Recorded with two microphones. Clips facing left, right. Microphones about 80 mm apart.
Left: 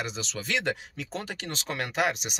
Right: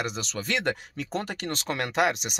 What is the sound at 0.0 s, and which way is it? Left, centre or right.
Speech, right.